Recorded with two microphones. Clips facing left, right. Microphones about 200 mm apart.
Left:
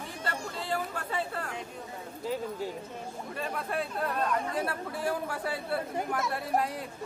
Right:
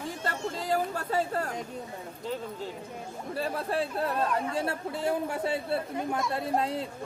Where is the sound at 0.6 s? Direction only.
40° right (ahead or behind).